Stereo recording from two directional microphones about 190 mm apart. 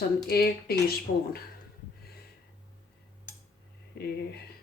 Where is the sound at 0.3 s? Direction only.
55° left (ahead or behind).